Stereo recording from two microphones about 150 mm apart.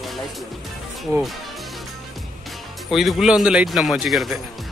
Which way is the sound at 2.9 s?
Centre (ahead or behind).